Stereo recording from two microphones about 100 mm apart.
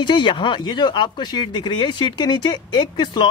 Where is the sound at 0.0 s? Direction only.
50° left (ahead or behind).